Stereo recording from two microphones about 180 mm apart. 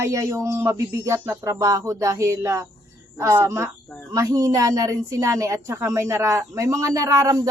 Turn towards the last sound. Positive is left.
turn(degrees=-20)  # may be behind; listen again after turning